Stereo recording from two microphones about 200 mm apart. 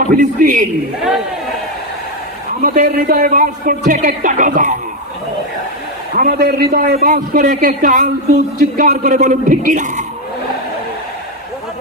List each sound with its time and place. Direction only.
0.1 s a man's voice: 40° right (ahead or behind)
2.6 s a man's voice: 40° right (ahead or behind)
6.1 s a man's voice: 50° right (ahead or behind)